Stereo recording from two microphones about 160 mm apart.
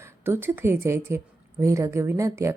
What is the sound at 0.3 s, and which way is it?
Speech, 15° right (ahead or behind).